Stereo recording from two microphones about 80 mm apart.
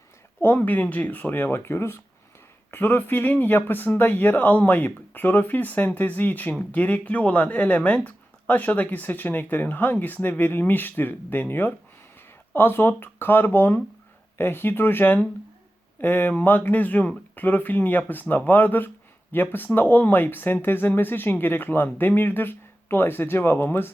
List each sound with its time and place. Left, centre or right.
0.4 s speech: left